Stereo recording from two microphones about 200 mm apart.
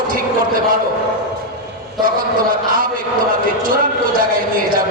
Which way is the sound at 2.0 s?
45° right (ahead or behind).